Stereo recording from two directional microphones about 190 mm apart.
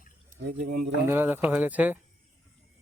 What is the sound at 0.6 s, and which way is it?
Speech, 55° right (ahead or behind).